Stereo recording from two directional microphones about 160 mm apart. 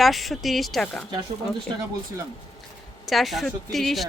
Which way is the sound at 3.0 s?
Centre (ahead or behind).